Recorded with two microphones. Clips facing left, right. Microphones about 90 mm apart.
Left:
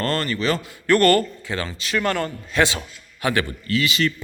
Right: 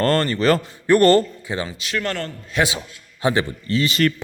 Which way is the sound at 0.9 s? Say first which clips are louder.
Right 3 dB; 20° right (ahead or behind).